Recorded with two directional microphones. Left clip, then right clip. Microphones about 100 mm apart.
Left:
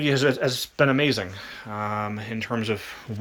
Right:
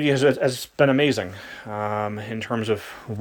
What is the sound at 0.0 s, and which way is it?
Speech, 25° right (ahead or behind).